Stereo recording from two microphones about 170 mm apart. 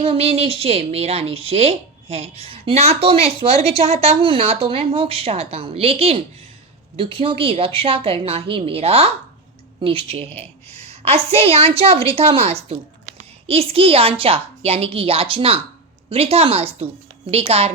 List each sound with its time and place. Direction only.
0.0 s a woman's voice: 35° right (ahead or behind)